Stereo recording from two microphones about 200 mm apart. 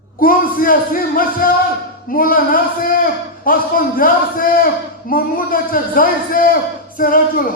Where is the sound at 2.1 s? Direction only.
45° left (ahead or behind).